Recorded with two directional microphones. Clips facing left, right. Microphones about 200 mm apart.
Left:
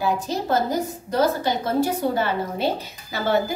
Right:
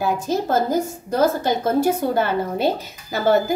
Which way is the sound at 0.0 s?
50° right (ahead or behind).